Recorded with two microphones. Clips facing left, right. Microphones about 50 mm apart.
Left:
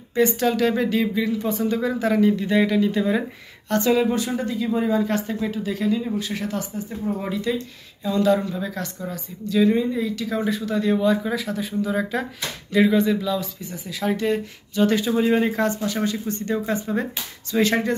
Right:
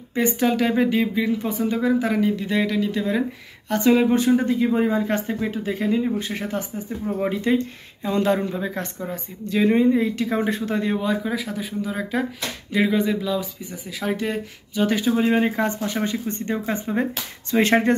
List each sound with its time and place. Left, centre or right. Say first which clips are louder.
0.1 s speech: left 1 dB; centre
3.7 s speech: right 2 dB; centre; by 10.8 s right
10.8 s speech: left 3 dB; centre
15.1 s speech: even; centre
17.6 s speech: right 3 dB; right